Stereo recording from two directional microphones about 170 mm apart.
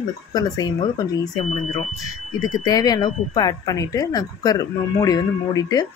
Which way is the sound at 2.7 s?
25° left (ahead or behind).